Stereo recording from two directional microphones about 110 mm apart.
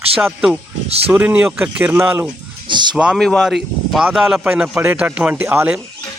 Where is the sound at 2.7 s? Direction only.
45° right (ahead or behind).